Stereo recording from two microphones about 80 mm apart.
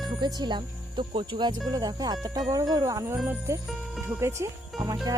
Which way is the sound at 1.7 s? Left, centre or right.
Right.